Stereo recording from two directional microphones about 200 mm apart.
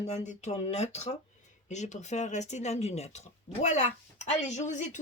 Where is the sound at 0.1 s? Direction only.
35° left (ahead or behind).